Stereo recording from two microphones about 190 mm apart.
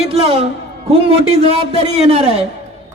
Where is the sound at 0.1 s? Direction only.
30° right (ahead or behind).